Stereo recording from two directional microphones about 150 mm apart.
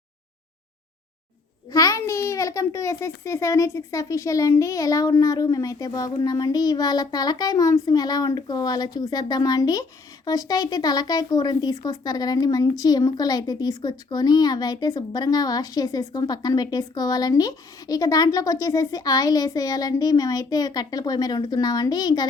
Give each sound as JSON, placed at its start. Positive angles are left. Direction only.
{"t": 1.7, "sound": "speech", "side_deg": 20}